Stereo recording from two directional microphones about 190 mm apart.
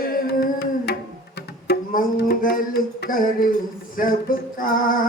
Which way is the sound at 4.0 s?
50° left (ahead or behind).